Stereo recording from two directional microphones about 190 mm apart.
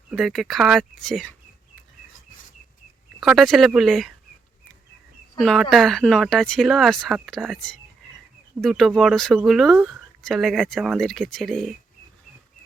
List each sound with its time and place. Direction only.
0.1 s speech: centre (ahead or behind)
3.2 s speech: centre (ahead or behind)
5.4 s speech: 5° left (ahead or behind)